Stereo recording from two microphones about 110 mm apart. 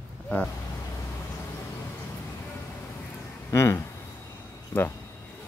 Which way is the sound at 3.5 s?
25° left (ahead or behind).